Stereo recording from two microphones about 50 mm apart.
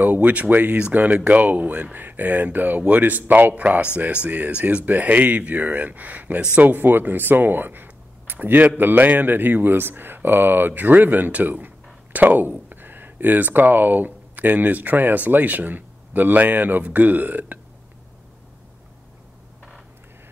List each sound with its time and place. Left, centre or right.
0.0 s speech: right
6.7 s speech: right